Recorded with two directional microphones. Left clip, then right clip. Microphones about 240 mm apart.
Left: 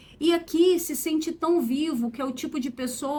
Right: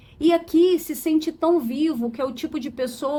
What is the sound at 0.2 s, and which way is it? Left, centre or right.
Speech, right.